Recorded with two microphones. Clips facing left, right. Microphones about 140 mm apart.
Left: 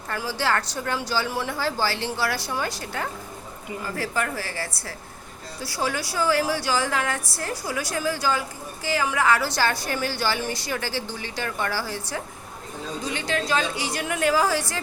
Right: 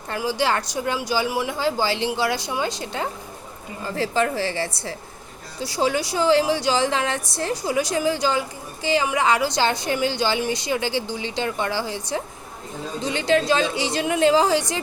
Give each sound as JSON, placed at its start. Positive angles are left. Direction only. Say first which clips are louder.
{"t": 0.1, "sound": "a woman's voice", "louder": "right 3 dB", "side_deg": -15}